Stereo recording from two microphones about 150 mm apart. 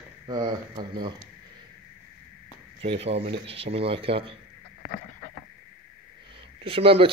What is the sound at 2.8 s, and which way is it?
A man's voice, 40° right (ahead or behind).